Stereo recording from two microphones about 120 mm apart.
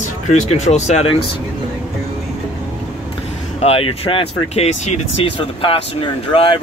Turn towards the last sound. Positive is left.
turn(degrees=45)  # may be behind; listen again after turning